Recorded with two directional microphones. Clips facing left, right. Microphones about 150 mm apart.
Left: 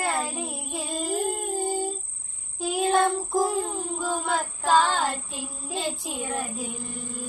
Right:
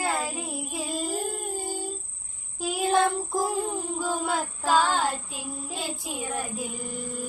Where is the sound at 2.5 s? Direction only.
Centre (ahead or behind).